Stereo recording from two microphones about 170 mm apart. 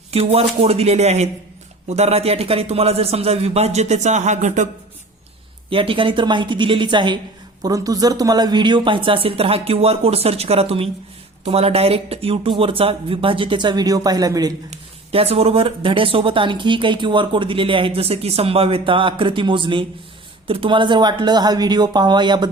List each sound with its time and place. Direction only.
0.1 s speech: 35° right (ahead or behind)
5.7 s speech: 30° right (ahead or behind)
14.7 s speech: 35° right (ahead or behind)